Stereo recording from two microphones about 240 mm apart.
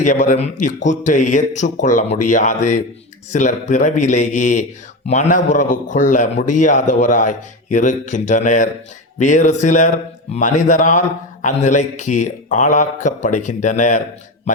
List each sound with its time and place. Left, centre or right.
0.0 s a man's voice: left